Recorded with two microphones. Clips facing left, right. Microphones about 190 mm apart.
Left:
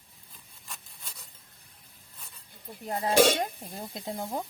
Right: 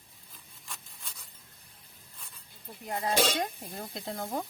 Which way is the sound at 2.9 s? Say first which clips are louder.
Left 2 dB; 30° left (ahead or behind).